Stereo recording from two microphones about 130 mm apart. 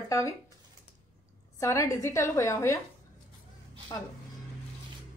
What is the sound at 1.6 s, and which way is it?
A woman's voice, 25° left (ahead or behind).